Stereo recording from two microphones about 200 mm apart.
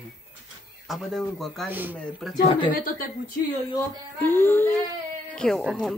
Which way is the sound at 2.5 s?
25° left (ahead or behind).